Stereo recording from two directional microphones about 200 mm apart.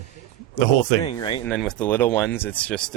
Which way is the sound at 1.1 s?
25° left (ahead or behind).